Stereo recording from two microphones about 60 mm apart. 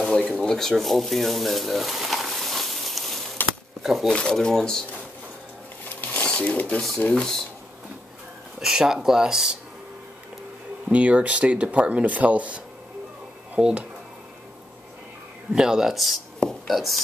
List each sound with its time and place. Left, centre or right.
0.0 s a sound: centre
0.4 s speech: centre
3.4 s a sound: left
3.8 s speech: centre
4.1 s speech: centre
5.9 s a sound: left
7.2 s speech: centre
8.5 s speech: centre
10.9 s speech: right
15.5 s speech: centre